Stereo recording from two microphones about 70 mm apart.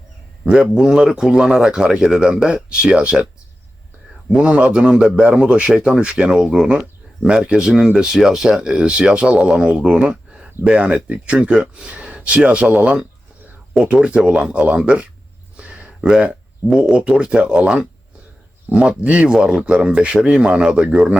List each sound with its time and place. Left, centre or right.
0.4 s speech: centre
4.3 s speech: centre